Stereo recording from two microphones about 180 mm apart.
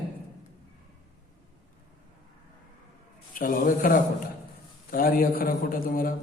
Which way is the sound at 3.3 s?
50° left (ahead or behind).